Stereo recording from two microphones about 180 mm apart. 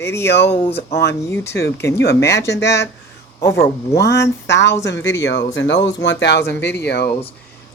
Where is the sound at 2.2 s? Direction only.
15° left (ahead or behind).